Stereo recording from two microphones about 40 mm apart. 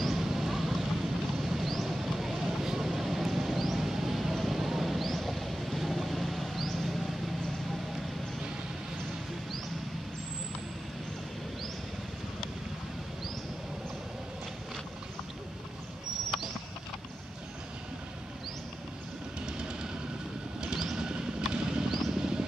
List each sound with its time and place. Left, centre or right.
0.0 s vehicle: centre
19.4 s music: right
20.6 s vehicle: centre
21.6 s a sound: centre
22.1 s vehicle: centre